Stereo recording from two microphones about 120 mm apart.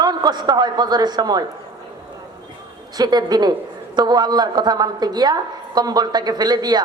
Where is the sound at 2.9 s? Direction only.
35° right (ahead or behind).